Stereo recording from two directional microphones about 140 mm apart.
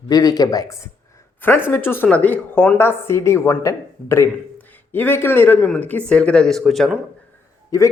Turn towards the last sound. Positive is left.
turn(degrees=20)  # may be behind; listen again after turning